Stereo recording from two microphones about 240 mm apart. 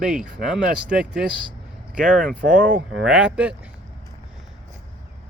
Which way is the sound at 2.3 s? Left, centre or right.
Right.